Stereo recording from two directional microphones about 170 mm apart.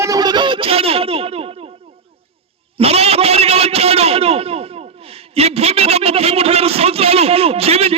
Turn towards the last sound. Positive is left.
turn(degrees=-35)  # may be behind; listen again after turning